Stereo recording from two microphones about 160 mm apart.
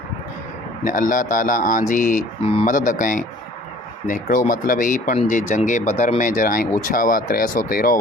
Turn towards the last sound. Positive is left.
turn(degrees=60)  # may be behind; listen again after turning